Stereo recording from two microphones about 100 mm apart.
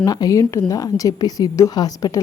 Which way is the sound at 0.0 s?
40° left (ahead or behind).